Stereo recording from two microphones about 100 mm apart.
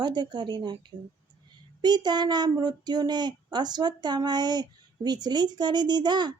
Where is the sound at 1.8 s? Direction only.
45° right (ahead or behind).